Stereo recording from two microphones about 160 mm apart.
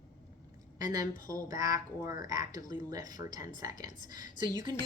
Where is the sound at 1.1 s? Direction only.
55° left (ahead or behind).